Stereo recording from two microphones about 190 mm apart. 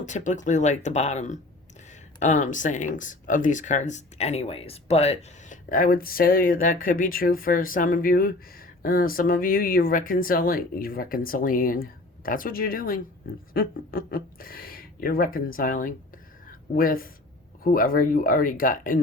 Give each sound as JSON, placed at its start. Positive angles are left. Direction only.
{"t": 0.0, "sound": "speech", "side_deg": 40}
{"t": 16.5, "sound": "a sound", "side_deg": 50}
{"t": 17.6, "sound": "speech", "side_deg": 50}